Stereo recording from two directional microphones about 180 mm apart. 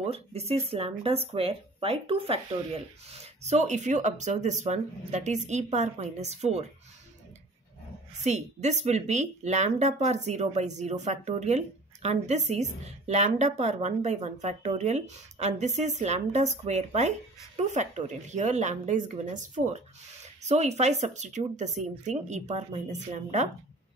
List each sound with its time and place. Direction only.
0.0 s speech: 35° right (ahead or behind)
8.2 s speech: 40° right (ahead or behind)